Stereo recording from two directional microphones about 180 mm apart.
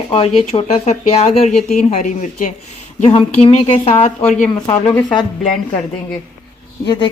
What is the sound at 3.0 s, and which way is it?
Speech, 35° left (ahead or behind).